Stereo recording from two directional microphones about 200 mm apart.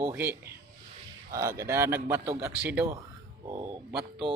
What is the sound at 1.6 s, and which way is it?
A man's voice, 15° right (ahead or behind).